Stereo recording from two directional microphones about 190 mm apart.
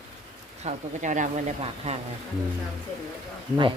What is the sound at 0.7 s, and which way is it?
A woman's voice, 40° right (ahead or behind).